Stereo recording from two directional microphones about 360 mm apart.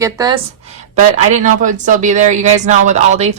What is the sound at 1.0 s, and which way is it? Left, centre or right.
A woman's voice, centre.